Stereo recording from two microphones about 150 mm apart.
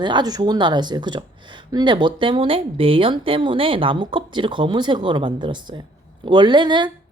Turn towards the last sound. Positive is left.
turn(degrees=-30)  # may be behind; listen again after turning